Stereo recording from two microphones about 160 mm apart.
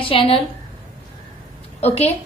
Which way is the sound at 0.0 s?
35° left (ahead or behind).